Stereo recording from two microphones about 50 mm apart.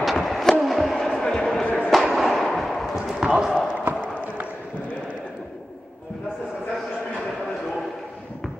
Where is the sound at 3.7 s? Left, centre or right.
Right.